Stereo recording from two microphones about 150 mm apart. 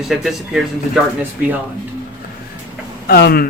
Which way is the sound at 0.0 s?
Centre (ahead or behind).